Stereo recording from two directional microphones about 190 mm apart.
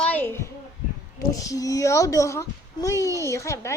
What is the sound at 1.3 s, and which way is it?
A child's voice, 15° left (ahead or behind).